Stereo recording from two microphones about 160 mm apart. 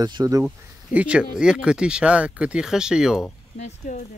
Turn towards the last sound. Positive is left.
turn(degrees=45)  # may be behind; listen again after turning